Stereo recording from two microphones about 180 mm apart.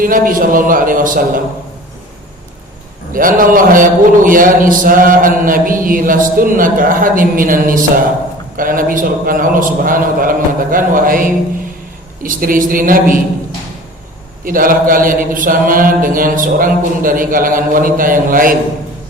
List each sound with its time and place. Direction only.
0.0 s a man's voice: 50° right (ahead or behind)
3.1 s a man's voice: 50° right (ahead or behind)
14.4 s a man's voice: 50° right (ahead or behind)